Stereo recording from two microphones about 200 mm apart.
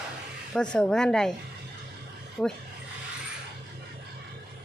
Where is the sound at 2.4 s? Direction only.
5° left (ahead or behind).